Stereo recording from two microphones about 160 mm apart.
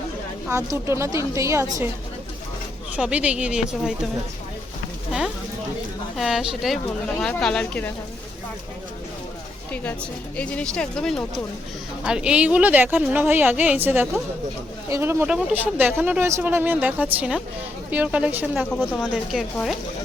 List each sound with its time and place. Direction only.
0.4 s a woman's voice: 15° right (ahead or behind)
2.9 s speech: 10° right (ahead or behind)
6.1 s speech: centre (ahead or behind)
9.7 s speech: 10° left (ahead or behind)